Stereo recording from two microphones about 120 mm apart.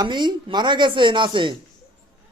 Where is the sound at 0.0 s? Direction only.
40° right (ahead or behind).